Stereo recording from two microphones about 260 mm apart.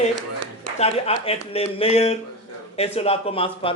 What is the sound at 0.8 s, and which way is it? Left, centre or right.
A man's voice, left.